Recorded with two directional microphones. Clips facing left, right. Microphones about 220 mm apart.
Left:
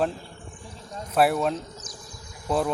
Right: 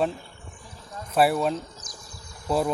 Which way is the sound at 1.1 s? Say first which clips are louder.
Even; centre (ahead or behind).